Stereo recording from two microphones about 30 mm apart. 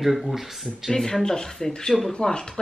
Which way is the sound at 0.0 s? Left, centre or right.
Centre.